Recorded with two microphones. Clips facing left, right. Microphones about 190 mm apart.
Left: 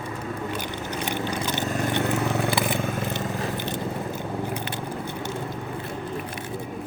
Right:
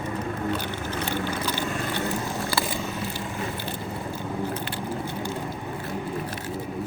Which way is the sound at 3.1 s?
20° left (ahead or behind).